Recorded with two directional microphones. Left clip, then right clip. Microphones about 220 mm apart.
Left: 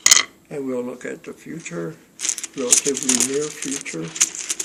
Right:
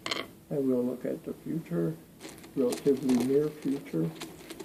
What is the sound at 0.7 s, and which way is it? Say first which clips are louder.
Speech: left 4 dB; 5° left (ahead or behind).